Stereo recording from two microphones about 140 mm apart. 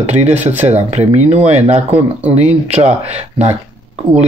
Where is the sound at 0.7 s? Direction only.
50° right (ahead or behind).